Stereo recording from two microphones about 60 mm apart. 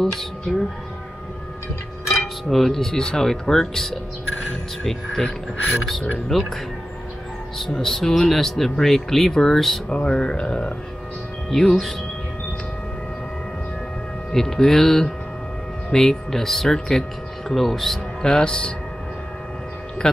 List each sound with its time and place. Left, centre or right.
0.0 s speech: centre
2.4 s speech: centre
9.8 s speech: centre
11.5 s speech: centre
14.3 s speech: centre